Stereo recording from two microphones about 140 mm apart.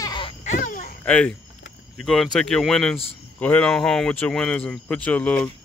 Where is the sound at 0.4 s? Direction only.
65° left (ahead or behind).